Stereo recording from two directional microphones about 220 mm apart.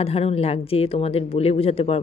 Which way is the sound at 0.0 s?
25° left (ahead or behind).